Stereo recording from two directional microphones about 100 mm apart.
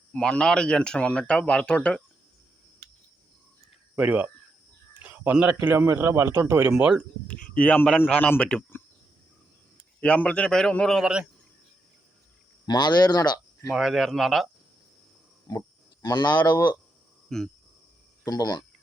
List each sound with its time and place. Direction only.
0.1 s speech: 10° left (ahead or behind)
3.9 s speech: 15° right (ahead or behind)
5.0 s a sound: 15° right (ahead or behind)
5.7 s speech: 25° right (ahead or behind)
6.7 s speech: 10° right (ahead or behind)
7.3 s a man's voice: 10° left (ahead or behind)
9.7 s a man's voice: 10° left (ahead or behind)
12.6 s speech: 45° left (ahead or behind)
13.7 s speech: 5° right (ahead or behind)
15.4 s livestock: 35° left (ahead or behind)
17.2 s speech: 5° left (ahead or behind)
18.3 s speech: 40° left (ahead or behind)